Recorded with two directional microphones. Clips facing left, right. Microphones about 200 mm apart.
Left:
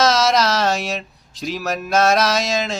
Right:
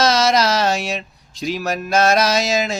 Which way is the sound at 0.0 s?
Centre (ahead or behind).